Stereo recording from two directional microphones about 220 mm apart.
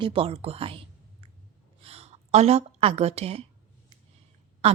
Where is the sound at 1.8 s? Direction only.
25° right (ahead or behind).